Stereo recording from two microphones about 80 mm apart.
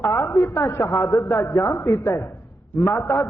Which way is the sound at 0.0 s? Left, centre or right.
Left.